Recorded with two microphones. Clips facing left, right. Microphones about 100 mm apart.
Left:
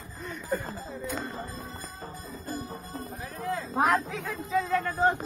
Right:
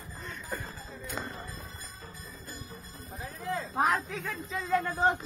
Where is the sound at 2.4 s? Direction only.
45° left (ahead or behind).